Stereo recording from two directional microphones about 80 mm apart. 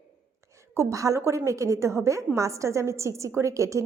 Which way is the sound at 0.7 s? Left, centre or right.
Right.